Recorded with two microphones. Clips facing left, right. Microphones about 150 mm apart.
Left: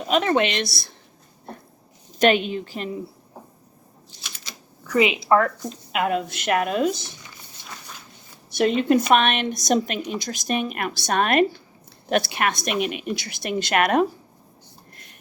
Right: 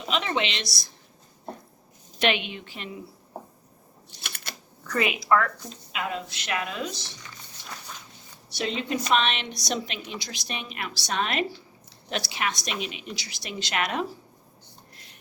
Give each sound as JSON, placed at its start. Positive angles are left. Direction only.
{"t": 0.1, "sound": "a woman's voice", "side_deg": 50}
{"t": 2.1, "sound": "a woman's voice", "side_deg": 40}
{"t": 4.2, "sound": "typewriter", "side_deg": -60}
{"t": 4.8, "sound": "a sound", "side_deg": 10}
{"t": 5.0, "sound": "speech", "side_deg": 25}
{"t": 5.9, "sound": "a woman's voice", "side_deg": 60}
{"t": 8.4, "sound": "a woman's voice", "side_deg": 55}